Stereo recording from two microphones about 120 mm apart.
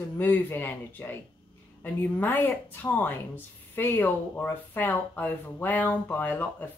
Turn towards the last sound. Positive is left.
turn(degrees=15)  # may be behind; listen again after turning